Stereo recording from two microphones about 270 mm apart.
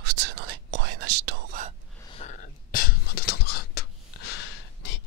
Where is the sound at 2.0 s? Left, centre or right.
Left.